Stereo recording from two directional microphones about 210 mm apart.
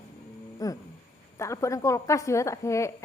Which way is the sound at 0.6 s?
15° left (ahead or behind).